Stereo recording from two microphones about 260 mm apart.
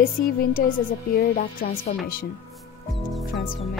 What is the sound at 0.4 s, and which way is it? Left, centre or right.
Music, left.